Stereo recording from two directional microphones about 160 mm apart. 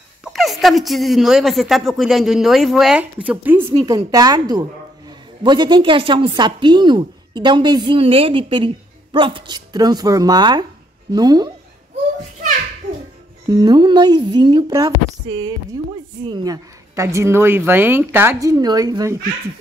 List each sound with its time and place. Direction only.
0.2 s speech: centre (ahead or behind)
3.8 s a woman's voice: 25° right (ahead or behind)
13.5 s a woman's voice: 25° right (ahead or behind)